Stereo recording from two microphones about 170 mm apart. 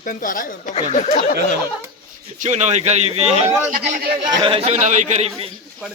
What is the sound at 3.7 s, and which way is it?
Speech, 65° right (ahead or behind).